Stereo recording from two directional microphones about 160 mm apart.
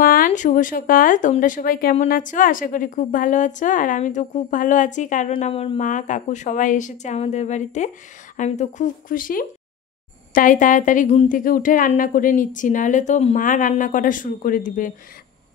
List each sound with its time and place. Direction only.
0.0 s a woman's voice: 60° left (ahead or behind)
5.4 s speech: 40° left (ahead or behind)
5.8 s a woman's voice: 50° left (ahead or behind)